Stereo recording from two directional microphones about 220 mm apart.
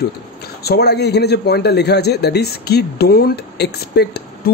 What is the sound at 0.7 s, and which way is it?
A man's voice, 50° left (ahead or behind).